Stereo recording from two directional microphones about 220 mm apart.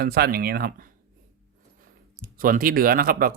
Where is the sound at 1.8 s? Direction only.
40° right (ahead or behind).